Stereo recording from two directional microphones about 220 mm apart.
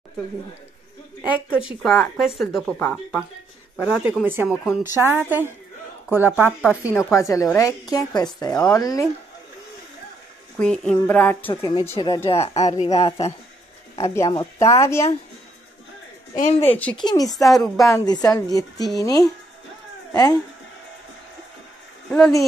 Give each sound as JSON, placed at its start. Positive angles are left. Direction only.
{"t": 1.2, "sound": "a woman's voice", "side_deg": -5}
{"t": 6.9, "sound": "a woman's voice", "side_deg": 15}
{"t": 10.6, "sound": "a woman's voice", "side_deg": 5}
{"t": 11.7, "sound": "a woman's voice", "side_deg": 20}
{"t": 16.3, "sound": "a woman's voice", "side_deg": 35}
{"t": 16.6, "sound": "a woman's voice", "side_deg": 5}
{"t": 16.9, "sound": "a woman's voice", "side_deg": 20}
{"t": 17.5, "sound": "speech", "side_deg": 0}
{"t": 17.8, "sound": "a woman's voice", "side_deg": 15}